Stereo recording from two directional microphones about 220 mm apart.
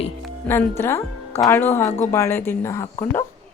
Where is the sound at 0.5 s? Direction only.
5° left (ahead or behind).